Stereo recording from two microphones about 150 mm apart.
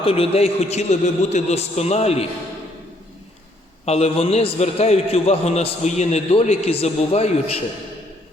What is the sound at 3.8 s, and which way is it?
A man's voice, 45° left (ahead or behind).